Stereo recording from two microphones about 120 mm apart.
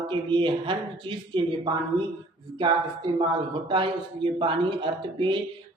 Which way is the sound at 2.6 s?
40° right (ahead or behind).